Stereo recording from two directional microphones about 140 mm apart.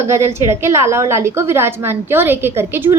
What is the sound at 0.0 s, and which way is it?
A woman's voice, 20° right (ahead or behind).